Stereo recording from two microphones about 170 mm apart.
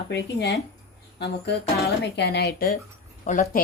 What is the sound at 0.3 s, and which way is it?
Speech, 90° left.